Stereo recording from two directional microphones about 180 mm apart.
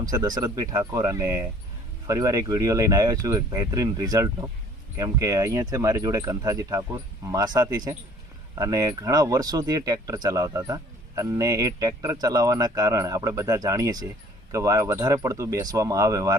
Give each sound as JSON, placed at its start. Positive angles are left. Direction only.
{"t": 0.0, "sound": "speech", "side_deg": -20}